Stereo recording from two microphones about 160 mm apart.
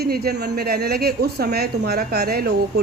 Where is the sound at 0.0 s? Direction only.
80° right.